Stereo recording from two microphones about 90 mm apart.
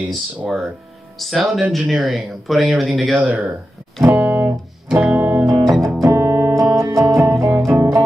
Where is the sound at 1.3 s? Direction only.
Centre (ahead or behind).